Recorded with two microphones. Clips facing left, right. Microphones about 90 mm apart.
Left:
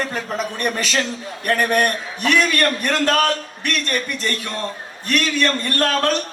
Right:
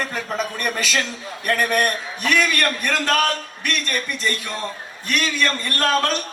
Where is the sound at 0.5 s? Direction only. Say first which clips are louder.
Left 2 dB; 40° left (ahead or behind).